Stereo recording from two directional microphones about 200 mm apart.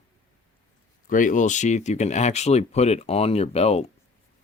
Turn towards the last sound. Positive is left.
turn(degrees=30)  # may be behind; listen again after turning